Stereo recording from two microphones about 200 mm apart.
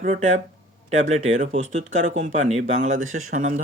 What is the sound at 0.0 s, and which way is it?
Speech, 35° right (ahead or behind).